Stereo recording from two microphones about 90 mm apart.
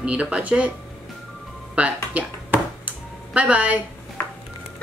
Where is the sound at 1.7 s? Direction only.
15° right (ahead or behind).